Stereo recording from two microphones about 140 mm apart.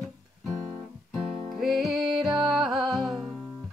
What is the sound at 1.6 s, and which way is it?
Music, centre (ahead or behind).